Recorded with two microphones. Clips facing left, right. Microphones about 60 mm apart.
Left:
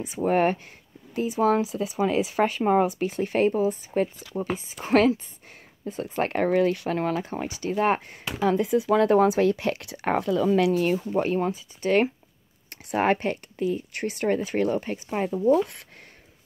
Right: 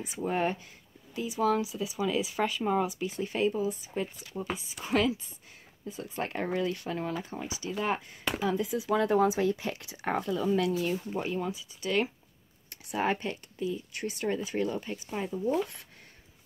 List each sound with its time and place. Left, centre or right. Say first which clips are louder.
0.2 s speech: left 8 dB; left
1.1 s speech: left 6 dB; left
4.8 s speech: left 8 dB; left
11.1 s speech: left 8 dB; left
12.6 s speech: left 7 dB; left
15.3 s speech: left 9 dB; left